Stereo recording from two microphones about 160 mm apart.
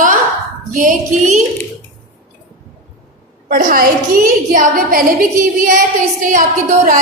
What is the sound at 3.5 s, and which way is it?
A woman's voice, 60° right (ahead or behind).